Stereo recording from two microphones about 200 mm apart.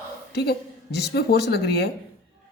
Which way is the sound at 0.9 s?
55° left (ahead or behind).